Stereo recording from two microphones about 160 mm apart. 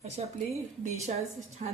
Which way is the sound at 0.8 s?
40° right (ahead or behind).